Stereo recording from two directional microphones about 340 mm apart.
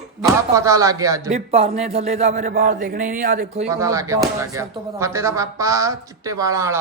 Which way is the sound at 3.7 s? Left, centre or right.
Centre.